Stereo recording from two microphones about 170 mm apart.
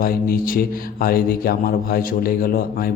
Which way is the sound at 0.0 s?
60° left (ahead or behind).